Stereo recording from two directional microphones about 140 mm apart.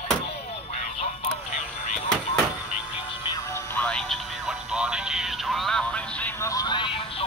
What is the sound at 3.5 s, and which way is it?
Music, 10° left (ahead or behind).